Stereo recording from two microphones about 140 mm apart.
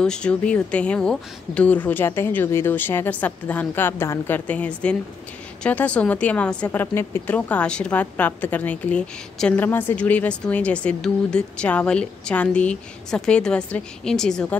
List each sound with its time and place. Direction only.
0.0 s a woman's voice: 5° left (ahead or behind)